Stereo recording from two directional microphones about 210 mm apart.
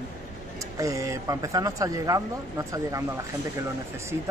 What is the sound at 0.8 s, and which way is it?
Speech, 15° right (ahead or behind).